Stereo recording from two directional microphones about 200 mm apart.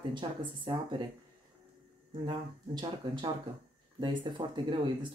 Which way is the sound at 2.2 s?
25° right (ahead or behind).